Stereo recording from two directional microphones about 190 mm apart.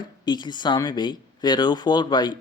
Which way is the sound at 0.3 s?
25° left (ahead or behind).